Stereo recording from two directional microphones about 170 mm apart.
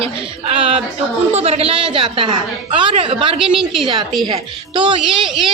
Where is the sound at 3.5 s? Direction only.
Centre (ahead or behind).